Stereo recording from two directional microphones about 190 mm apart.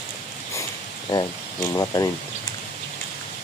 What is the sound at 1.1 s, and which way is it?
Speech, 20° left (ahead or behind).